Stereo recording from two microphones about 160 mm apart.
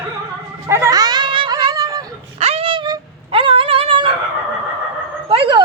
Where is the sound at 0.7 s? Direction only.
20° right (ahead or behind).